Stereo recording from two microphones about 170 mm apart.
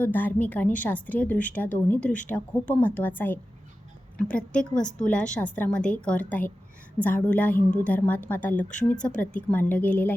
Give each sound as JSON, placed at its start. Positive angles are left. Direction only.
{"t": 0.0, "sound": "a woman's voice", "side_deg": 10}